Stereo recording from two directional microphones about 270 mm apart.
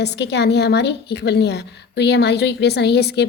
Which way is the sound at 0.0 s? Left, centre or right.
Left.